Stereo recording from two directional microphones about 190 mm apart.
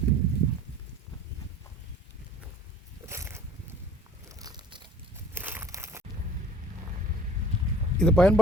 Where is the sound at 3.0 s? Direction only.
15° right (ahead or behind).